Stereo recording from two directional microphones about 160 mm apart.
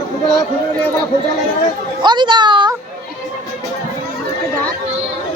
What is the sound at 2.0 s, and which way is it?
Speech, 30° right (ahead or behind).